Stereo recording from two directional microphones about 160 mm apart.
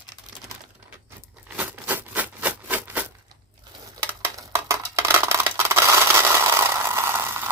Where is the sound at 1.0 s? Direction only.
10° right (ahead or behind).